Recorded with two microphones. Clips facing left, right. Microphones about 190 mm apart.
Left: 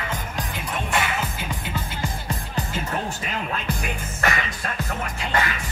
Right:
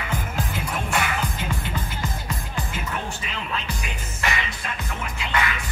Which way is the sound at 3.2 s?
50° left (ahead or behind).